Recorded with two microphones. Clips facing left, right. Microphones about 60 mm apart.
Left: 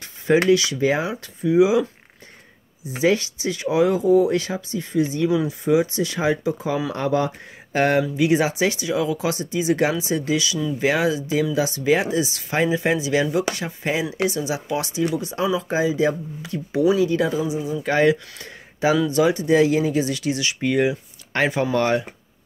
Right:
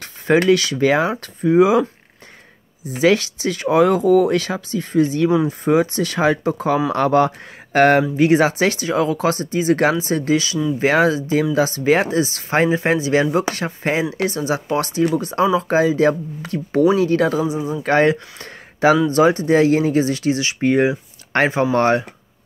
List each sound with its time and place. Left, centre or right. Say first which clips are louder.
0.0 s speech: right 2 dB; right
1.5 s speech: right 3 dB; right
3.0 s speech: right 4 dB; right
5.3 s speech: right 4 dB; right
5.6 s speech: right 3 dB; right
6.9 s speech: right 7 dB; right
8.0 s speech: right 4 dB; right
19.0 s speech: right 4 dB; right
21.3 s speech: right 4 dB; right